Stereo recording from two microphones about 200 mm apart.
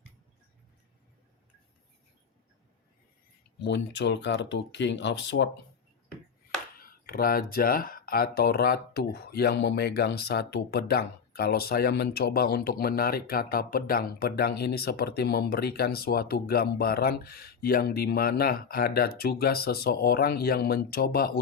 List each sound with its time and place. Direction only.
3.6 s speech: 60° left (ahead or behind)
6.7 s speech: 45° left (ahead or behind)